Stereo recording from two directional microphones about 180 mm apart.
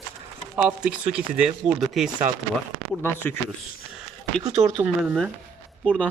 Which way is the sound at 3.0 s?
10° left (ahead or behind).